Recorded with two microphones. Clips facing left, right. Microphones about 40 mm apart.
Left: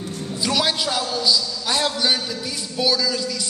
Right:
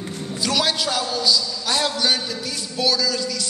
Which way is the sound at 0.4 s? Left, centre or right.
Centre.